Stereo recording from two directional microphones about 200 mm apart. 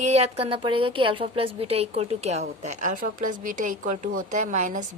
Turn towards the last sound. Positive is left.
turn(degrees=-40)  # may be behind; listen again after turning